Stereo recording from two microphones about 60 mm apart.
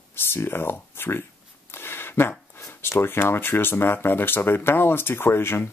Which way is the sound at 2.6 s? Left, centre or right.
Left.